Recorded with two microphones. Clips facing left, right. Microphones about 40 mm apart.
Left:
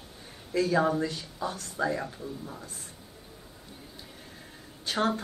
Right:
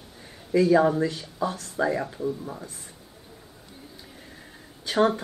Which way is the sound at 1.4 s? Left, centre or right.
Right.